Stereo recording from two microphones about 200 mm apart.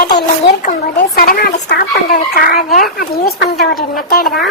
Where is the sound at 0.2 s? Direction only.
50° left (ahead or behind).